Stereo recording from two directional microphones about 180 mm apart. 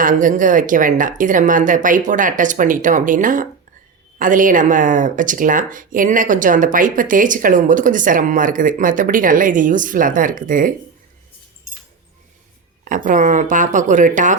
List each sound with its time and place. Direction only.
0.0 s speech: 45° right (ahead or behind)
12.8 s speech: 45° right (ahead or behind)